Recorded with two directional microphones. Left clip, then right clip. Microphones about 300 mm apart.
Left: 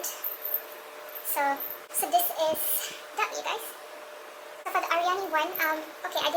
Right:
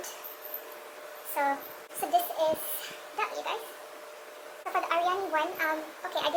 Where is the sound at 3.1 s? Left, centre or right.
Centre.